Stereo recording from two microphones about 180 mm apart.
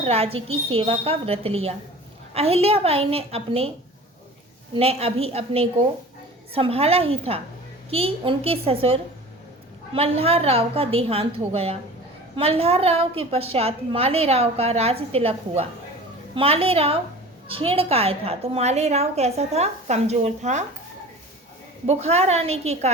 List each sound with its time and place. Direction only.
0.0 s a woman's voice: 35° right (ahead or behind)
4.7 s a woman's voice: 35° right (ahead or behind)
21.8 s a woman's voice: 35° right (ahead or behind)